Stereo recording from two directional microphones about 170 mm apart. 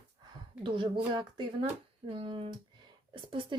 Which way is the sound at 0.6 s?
30° right (ahead or behind).